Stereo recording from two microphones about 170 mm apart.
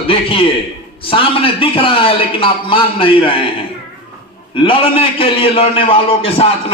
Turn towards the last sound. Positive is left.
turn(degrees=35)  # may be behind; listen again after turning